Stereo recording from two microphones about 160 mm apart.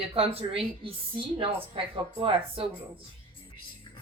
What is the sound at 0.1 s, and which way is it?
A woman's voice, 35° right (ahead or behind).